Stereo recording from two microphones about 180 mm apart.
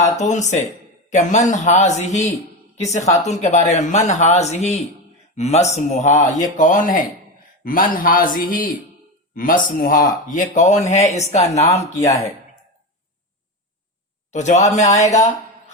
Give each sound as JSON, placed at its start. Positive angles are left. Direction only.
{"t": 0.0, "sound": "a man's voice", "side_deg": 40}
{"t": 11.9, "sound": "speech", "side_deg": 15}
{"t": 14.3, "sound": "speech", "side_deg": 40}